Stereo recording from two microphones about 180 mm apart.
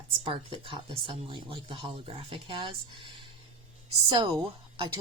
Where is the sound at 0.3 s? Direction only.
30° right (ahead or behind).